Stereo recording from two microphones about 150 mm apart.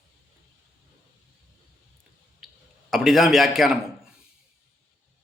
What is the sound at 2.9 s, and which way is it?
A man's voice, centre (ahead or behind).